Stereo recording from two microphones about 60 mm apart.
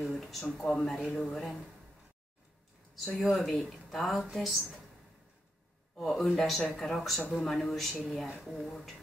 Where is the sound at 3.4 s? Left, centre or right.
Centre.